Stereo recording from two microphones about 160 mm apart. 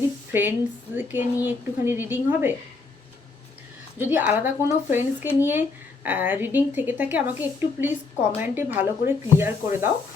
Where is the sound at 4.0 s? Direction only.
10° right (ahead or behind).